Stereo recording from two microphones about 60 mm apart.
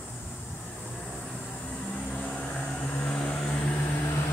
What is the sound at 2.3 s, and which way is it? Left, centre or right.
Vehicle, centre.